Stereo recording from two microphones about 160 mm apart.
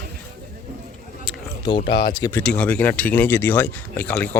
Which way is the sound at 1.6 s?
30° left (ahead or behind).